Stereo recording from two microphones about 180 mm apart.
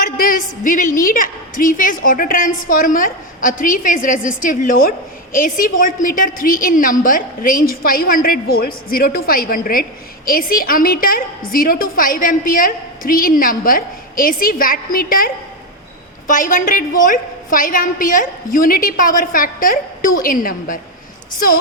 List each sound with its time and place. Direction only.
0.0 s a woman's voice: 50° left (ahead or behind)